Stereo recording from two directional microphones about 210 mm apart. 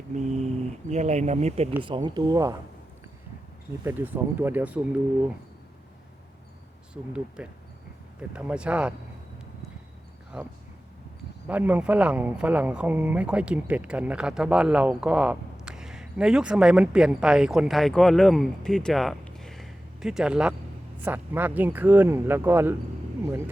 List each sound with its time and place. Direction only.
0.2 s a sound: 35° right (ahead or behind)
0.9 s speech: 30° right (ahead or behind); by 2.6 s 15° right (ahead or behind)
3.8 s speech: 10° right (ahead or behind)
6.9 s speech: 5° right (ahead or behind)
10.3 s speech: 5° right (ahead or behind)